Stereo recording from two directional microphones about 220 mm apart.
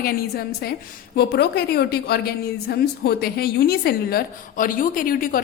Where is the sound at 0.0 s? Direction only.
45° left (ahead or behind).